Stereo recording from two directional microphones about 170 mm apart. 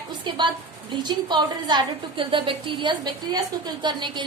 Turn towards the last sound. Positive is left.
turn(degrees=-25)  # may be behind; listen again after turning